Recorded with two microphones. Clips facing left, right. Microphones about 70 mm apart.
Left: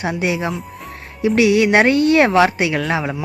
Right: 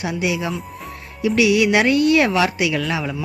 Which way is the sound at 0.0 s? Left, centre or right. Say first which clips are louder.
Left 2 dB; left.